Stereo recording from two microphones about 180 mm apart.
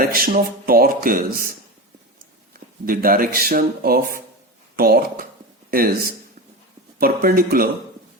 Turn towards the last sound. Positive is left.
turn(degrees=-55)  # may be behind; listen again after turning